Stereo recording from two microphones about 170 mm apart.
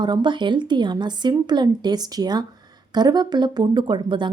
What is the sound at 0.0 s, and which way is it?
A woman's voice, 25° right (ahead or behind).